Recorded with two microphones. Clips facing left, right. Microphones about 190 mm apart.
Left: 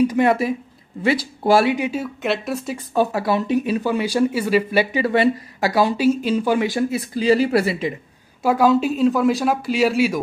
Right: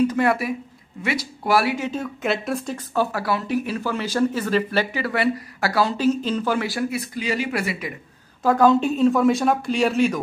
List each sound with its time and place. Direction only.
0.0 s speech: 15° left (ahead or behind)
1.9 s speech: 5° left (ahead or behind)
2.9 s speech: 20° left (ahead or behind)
7.2 s speech: 35° left (ahead or behind)
8.4 s speech: 10° left (ahead or behind)